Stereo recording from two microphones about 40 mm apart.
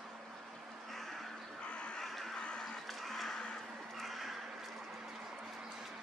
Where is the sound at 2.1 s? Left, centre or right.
Centre.